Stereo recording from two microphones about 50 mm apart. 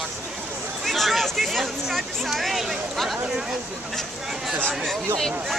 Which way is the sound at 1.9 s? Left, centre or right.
Centre.